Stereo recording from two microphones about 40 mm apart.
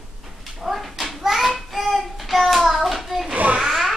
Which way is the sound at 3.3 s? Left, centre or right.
Right.